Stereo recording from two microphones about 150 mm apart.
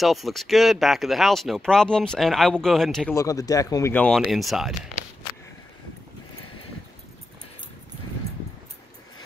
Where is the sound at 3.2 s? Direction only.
25° left (ahead or behind).